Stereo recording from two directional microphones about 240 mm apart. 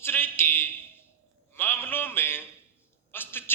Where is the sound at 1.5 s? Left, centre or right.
Centre.